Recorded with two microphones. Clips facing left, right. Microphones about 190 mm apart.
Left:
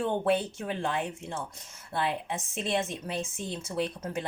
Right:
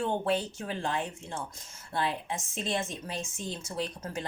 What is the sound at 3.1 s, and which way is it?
Speech, 60° left (ahead or behind).